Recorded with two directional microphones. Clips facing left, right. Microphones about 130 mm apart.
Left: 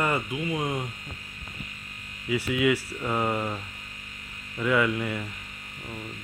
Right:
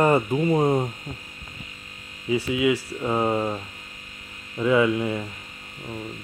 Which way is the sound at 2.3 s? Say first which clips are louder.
Right 3 dB; 20° right (ahead or behind).